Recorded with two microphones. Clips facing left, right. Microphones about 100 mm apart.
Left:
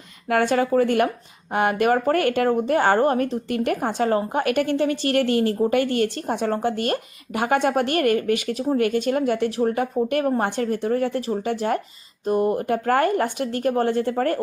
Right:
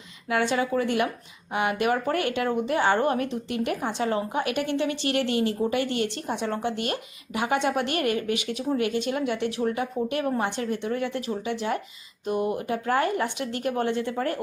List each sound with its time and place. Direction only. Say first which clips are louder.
0.3 s speech: left 5 dB; 50° left (ahead or behind)